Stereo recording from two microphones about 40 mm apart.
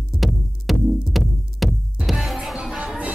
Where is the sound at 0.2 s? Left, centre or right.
Centre.